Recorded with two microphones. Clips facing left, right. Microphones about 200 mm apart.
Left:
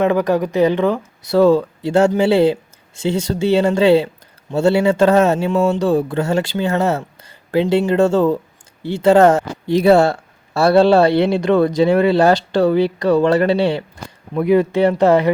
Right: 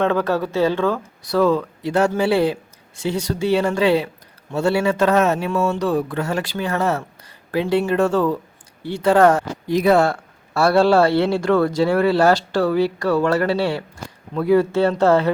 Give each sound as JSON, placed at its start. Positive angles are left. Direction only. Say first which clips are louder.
{"t": 0.0, "sound": "speech", "louder": "left 3 dB", "side_deg": 15}